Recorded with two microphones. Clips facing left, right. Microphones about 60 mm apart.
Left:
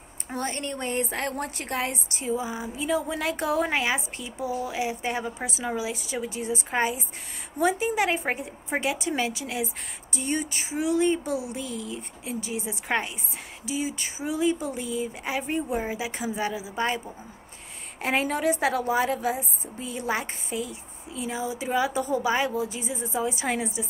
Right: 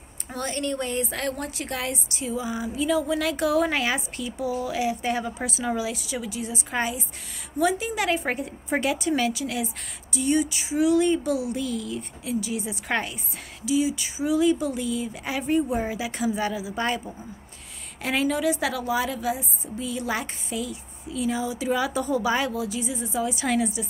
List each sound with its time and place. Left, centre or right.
0.3 s a woman's voice: left
2.5 s a woman's voice: left
8.3 s a woman's voice: centre; by 10.8 s left
10.8 s a woman's voice: left
12.3 s a woman's voice: left
13.7 s a woman's voice: left; by 17.0 s centre
18.0 s a woman's voice: left